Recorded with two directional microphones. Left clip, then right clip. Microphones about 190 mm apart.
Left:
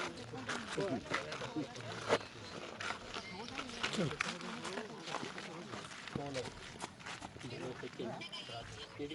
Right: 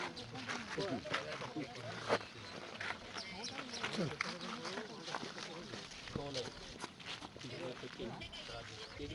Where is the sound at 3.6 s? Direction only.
55° left (ahead or behind).